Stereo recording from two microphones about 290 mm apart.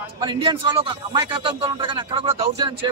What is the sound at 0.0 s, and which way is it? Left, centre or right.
Speech, centre.